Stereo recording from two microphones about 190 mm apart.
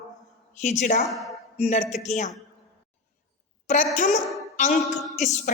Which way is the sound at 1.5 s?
35° left (ahead or behind).